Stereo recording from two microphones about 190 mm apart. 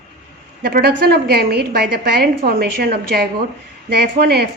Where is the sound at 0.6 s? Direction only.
55° right (ahead or behind).